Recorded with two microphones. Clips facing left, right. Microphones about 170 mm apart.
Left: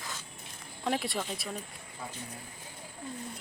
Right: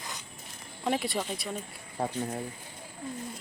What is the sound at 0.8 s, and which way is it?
Speech, centre (ahead or behind).